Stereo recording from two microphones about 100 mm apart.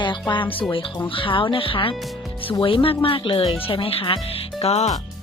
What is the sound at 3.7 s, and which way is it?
Speech, 65° left (ahead or behind).